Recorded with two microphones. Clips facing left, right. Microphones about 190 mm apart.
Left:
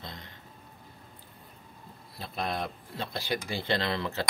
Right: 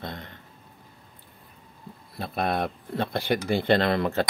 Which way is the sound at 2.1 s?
55° right (ahead or behind).